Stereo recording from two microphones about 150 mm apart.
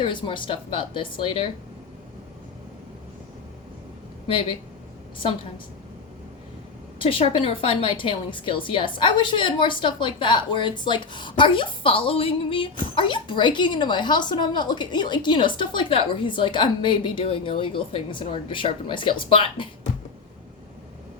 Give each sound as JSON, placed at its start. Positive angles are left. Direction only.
{"t": 0.0, "sound": "a woman's voice", "side_deg": 35}
{"t": 7.0, "sound": "a woman's voice", "side_deg": 35}